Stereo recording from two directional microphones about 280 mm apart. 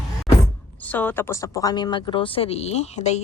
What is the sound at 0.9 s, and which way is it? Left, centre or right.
Speech, centre.